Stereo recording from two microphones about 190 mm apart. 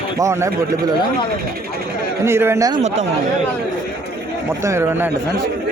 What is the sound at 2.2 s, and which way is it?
Speech, 15° right (ahead or behind).